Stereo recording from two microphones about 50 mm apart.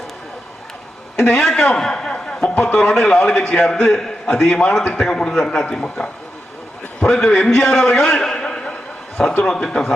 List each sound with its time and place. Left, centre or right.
1.2 s a man's voice: centre
7.8 s a sound: centre
9.4 s a man's voice: centre